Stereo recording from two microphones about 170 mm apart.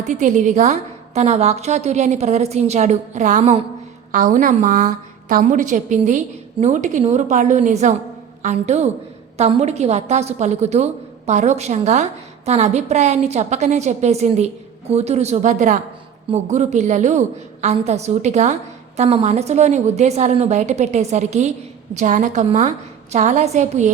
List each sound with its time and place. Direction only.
0.0 s a woman's voice: 45° right (ahead or behind)